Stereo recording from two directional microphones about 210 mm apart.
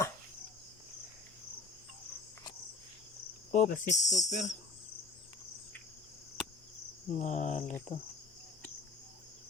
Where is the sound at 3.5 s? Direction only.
40° left (ahead or behind).